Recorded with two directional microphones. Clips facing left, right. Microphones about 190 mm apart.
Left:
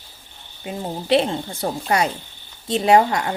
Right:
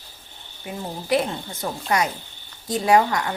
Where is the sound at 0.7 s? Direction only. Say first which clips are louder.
Left 4 dB; 25° left (ahead or behind).